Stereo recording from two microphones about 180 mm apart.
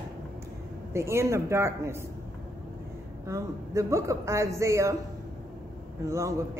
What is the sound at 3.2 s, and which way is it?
A woman's voice, 15° right (ahead or behind).